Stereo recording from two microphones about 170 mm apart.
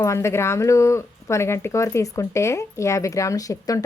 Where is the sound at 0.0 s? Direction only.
15° left (ahead or behind).